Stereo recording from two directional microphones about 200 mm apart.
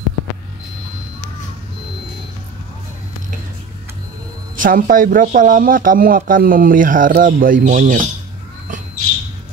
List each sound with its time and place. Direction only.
4.6 s speech: 45° right (ahead or behind)